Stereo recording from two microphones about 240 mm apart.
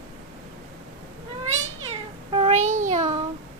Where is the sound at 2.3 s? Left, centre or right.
Right.